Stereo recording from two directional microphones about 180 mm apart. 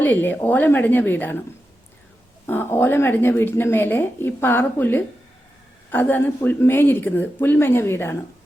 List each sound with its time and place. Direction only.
0.0 s speech: 10° left (ahead or behind)
2.5 s speech: 10° left (ahead or behind)